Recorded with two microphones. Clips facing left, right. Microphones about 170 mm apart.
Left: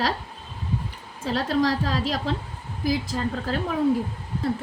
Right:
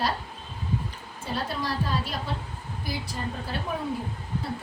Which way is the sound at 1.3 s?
90° left.